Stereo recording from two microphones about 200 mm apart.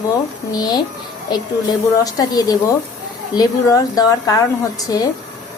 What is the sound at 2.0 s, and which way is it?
A woman's voice, 20° left (ahead or behind).